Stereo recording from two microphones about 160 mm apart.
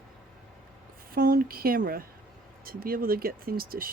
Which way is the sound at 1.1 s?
65° right (ahead or behind).